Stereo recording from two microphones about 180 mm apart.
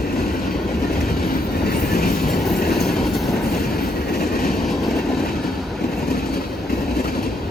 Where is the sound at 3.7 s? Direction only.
60° left (ahead or behind).